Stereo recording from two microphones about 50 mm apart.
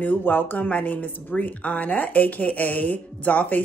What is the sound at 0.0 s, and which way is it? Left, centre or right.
Speech, left.